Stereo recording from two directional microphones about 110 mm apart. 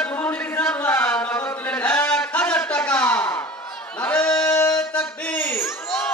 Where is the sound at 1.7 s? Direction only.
15° left (ahead or behind).